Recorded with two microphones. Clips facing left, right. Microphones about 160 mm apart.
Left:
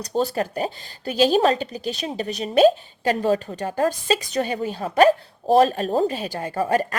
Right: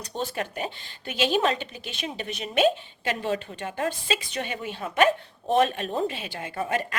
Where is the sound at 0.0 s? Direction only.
40° left (ahead or behind).